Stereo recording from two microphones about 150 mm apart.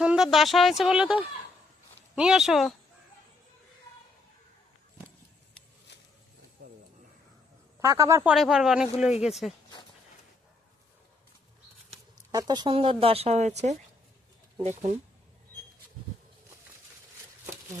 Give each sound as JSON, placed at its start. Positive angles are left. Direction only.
{"t": 0.0, "sound": "speech", "side_deg": -5}
{"t": 7.8, "sound": "speech", "side_deg": -20}
{"t": 8.2, "sound": "speech", "side_deg": -5}
{"t": 12.3, "sound": "speech", "side_deg": -25}
{"t": 12.7, "sound": "speech", "side_deg": -40}